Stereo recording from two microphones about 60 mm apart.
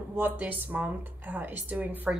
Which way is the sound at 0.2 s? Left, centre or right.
Right.